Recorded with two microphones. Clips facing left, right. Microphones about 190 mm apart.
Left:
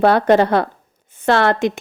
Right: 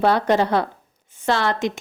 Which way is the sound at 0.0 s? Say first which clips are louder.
Left 5 dB; 55° left (ahead or behind).